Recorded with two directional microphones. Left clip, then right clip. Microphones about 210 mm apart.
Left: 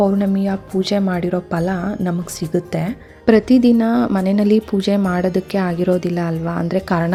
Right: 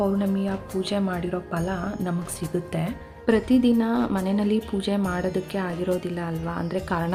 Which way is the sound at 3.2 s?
30° left (ahead or behind).